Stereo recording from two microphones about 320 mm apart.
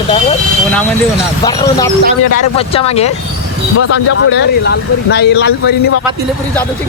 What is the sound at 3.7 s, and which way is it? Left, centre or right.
Speech, left.